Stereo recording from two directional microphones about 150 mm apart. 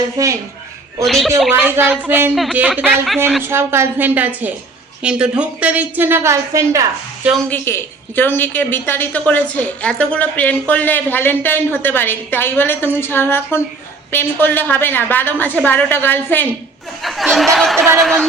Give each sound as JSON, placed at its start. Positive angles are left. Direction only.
{"t": 0.2, "sound": "speech", "side_deg": -25}
{"t": 1.0, "sound": "speech", "side_deg": 0}
{"t": 1.6, "sound": "a woman's voice", "side_deg": -15}
{"t": 7.5, "sound": "a woman's voice", "side_deg": 15}
{"t": 17.0, "sound": "speech", "side_deg": 0}